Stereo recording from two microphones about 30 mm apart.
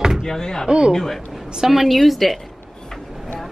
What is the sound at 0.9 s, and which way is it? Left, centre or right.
A man's voice, centre.